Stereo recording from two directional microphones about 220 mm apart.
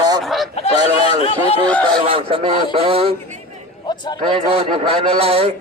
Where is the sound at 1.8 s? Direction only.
25° right (ahead or behind).